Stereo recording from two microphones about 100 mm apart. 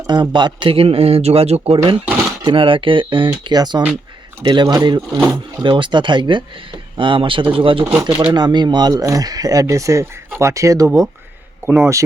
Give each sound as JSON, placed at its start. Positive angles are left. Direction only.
{"t": 0.1, "sound": "a man's voice", "side_deg": -50}
{"t": 2.4, "sound": "speech", "side_deg": -55}
{"t": 3.5, "sound": "speech", "side_deg": -45}
{"t": 5.6, "sound": "speech", "side_deg": -55}
{"t": 8.3, "sound": "speech", "side_deg": -45}
{"t": 11.6, "sound": "speech", "side_deg": -20}